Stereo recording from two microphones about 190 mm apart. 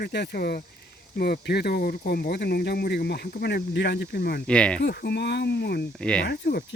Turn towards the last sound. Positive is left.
turn(degrees=55)  # may be behind; listen again after turning